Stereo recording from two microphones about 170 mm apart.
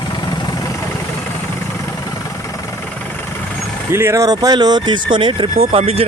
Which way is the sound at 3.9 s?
15° right (ahead or behind).